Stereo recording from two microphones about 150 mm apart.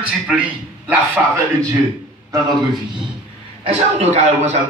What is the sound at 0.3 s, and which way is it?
Speech, 10° right (ahead or behind).